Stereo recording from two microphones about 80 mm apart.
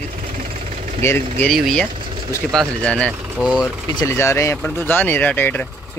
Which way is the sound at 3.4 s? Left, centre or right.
Centre.